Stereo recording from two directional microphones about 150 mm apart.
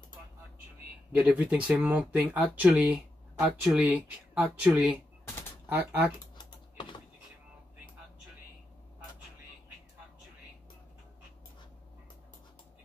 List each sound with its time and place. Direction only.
1.1 s speech: 10° right (ahead or behind)
6.3 s typing: 30° left (ahead or behind)